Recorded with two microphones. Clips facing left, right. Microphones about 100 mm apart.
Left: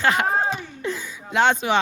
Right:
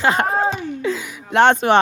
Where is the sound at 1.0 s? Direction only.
85° right; by 1.7 s 60° right (ahead or behind).